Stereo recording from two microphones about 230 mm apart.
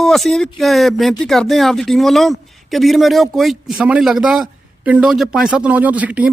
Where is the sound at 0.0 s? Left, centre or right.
Centre.